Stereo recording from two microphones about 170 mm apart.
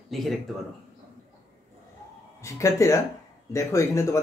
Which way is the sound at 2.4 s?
15° left (ahead or behind).